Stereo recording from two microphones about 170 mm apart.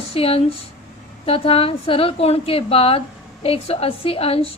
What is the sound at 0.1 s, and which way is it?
A woman's voice, 35° left (ahead or behind).